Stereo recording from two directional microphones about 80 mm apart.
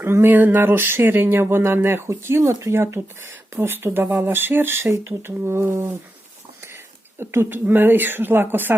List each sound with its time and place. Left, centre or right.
0.0 s speech: right
7.2 s speech: right